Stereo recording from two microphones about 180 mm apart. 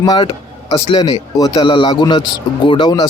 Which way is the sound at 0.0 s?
25° left (ahead or behind).